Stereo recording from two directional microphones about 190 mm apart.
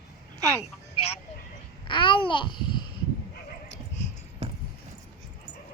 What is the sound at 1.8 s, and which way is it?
Babbling, 25° left (ahead or behind).